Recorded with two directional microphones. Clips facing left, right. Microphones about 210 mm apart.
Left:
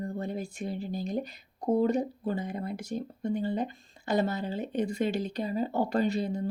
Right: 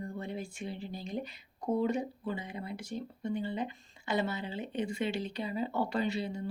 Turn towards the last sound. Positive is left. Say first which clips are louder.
# left 5 dB
turn(degrees=45)  # may be behind; listen again after turning